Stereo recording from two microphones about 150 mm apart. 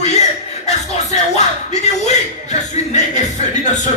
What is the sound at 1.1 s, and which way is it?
Speech, 50° left (ahead or behind).